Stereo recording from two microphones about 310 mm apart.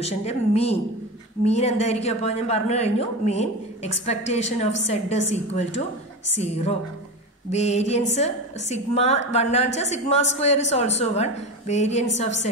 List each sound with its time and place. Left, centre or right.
0.0 s a woman's voice: centre